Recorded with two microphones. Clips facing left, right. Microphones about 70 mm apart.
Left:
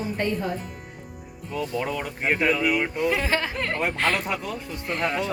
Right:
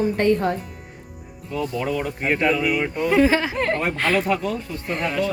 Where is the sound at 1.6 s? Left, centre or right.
Centre.